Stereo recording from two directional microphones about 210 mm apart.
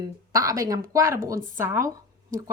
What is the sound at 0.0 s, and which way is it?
Speech, 15° right (ahead or behind).